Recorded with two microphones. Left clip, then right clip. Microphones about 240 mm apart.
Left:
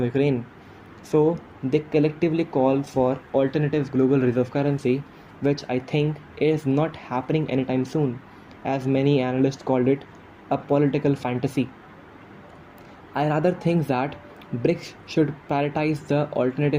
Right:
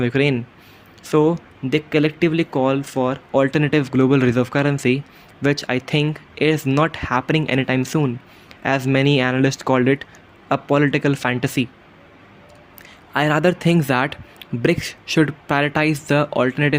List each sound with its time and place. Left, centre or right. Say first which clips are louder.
0.0 s a man's voice: right 4 dB; right
1.7 s a man's voice: right 3 dB; right
13.1 s a man's voice: right 5 dB; right